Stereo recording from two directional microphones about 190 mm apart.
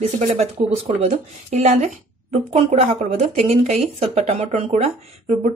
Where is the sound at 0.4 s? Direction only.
35° right (ahead or behind).